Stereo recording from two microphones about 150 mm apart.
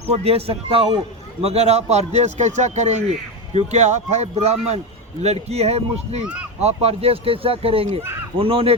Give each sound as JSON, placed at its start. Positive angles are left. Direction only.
{"t": 0.1, "sound": "speech", "side_deg": -40}